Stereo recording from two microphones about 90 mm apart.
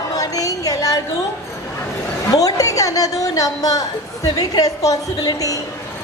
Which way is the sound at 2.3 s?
40° left (ahead or behind).